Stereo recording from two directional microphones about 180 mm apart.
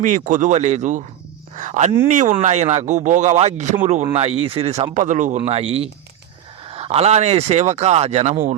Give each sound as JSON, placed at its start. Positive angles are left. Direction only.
{"t": 0.0, "sound": "speech", "side_deg": -45}